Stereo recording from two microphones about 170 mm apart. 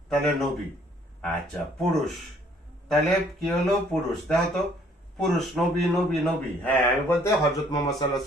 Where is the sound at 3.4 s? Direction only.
Centre (ahead or behind).